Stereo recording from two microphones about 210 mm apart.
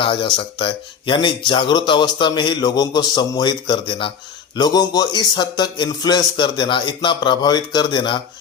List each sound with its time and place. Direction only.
0.0 s speech: 25° left (ahead or behind)